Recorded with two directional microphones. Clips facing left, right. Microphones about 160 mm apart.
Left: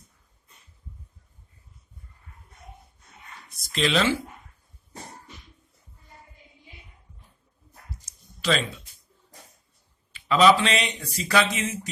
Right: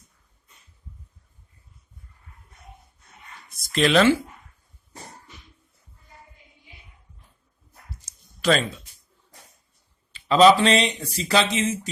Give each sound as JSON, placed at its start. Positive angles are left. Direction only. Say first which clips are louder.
{"t": 3.7, "sound": "speech", "louder": "right 6 dB", "side_deg": -55}
{"t": 8.4, "sound": "a sound", "louder": "right 4 dB", "side_deg": -50}
{"t": 10.1, "sound": "a man's voice", "louder": "right 3 dB", "side_deg": -30}